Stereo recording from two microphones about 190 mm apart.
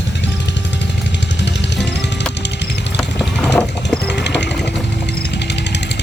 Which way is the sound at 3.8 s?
65° left (ahead or behind).